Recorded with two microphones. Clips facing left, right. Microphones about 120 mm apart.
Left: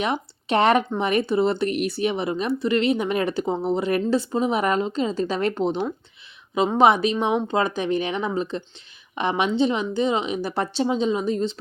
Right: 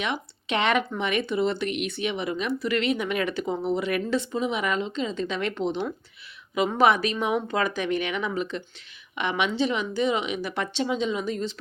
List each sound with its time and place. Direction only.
0.0 s speech: 35° left (ahead or behind)
6.7 s speech: 25° left (ahead or behind)